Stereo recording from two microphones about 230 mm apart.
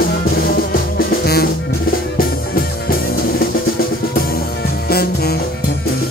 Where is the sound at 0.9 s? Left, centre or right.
Left.